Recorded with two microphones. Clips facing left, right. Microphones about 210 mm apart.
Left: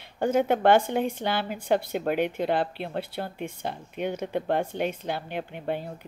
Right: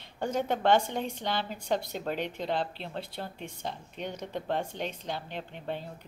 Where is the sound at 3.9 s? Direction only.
10° left (ahead or behind).